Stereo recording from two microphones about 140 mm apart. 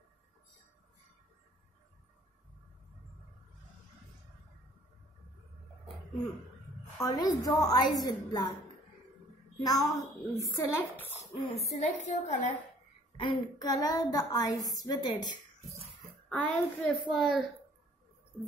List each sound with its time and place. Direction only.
7.0 s a woman's voice: 25° left (ahead or behind)
9.6 s a child's voice: 25° left (ahead or behind)
11.6 s a woman's voice: 55° left (ahead or behind)
13.2 s a child's voice: 30° left (ahead or behind)
16.3 s a woman's voice: 5° left (ahead or behind)